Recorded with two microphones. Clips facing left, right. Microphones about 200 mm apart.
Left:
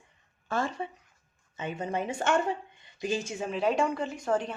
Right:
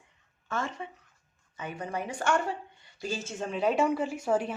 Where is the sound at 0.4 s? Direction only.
35° left (ahead or behind).